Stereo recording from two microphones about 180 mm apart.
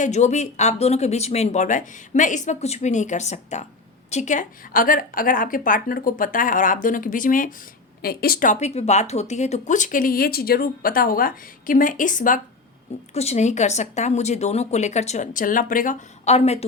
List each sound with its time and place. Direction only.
0.0 s speech: 40° left (ahead or behind)